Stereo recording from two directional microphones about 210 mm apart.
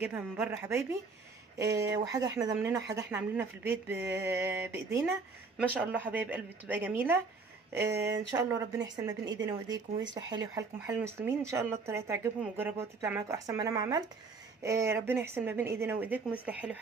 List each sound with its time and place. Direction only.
0.0 s speech: 10° right (ahead or behind)